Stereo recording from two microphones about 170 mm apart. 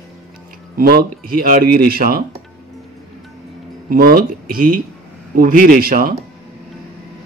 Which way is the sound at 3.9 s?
60° right (ahead or behind).